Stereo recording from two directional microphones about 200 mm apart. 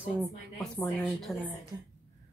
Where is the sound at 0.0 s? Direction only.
5° right (ahead or behind).